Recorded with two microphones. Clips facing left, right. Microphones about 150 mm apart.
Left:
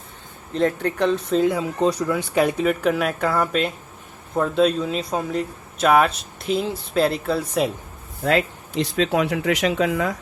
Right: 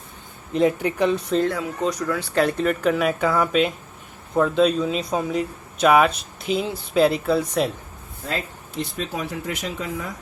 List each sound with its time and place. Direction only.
0.5 s speech: 10° right (ahead or behind)
1.5 s speech: 30° left (ahead or behind)
2.3 s speech: 10° left (ahead or behind)
8.2 s speech: 75° left (ahead or behind)